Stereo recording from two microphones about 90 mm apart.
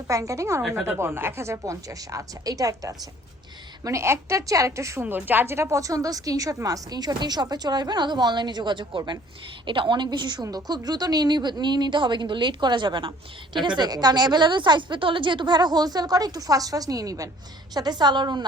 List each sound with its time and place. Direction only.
0.1 s a woman's voice: 35° right (ahead or behind)
5.0 s a woman's voice: 20° right (ahead or behind); by 17.2 s 40° right (ahead or behind)
17.7 s speech: 50° right (ahead or behind)